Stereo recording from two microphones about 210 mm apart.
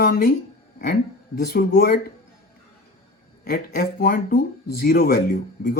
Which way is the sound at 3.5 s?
45° left (ahead or behind).